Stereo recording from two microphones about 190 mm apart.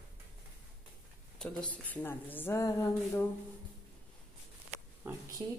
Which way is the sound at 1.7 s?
10° left (ahead or behind).